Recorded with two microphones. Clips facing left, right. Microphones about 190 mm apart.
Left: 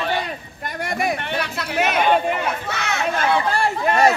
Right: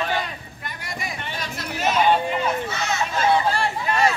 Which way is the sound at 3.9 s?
45° left (ahead or behind).